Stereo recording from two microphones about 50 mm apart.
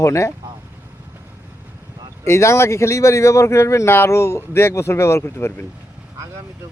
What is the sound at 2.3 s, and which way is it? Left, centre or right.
Speech, left.